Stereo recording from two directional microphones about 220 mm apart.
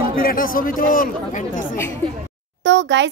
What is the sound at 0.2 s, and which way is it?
Speech, 40° left (ahead or behind).